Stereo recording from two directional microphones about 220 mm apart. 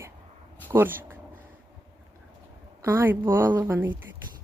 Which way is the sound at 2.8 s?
10° right (ahead or behind).